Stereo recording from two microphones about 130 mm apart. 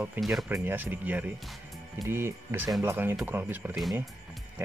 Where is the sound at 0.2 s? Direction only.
15° right (ahead or behind).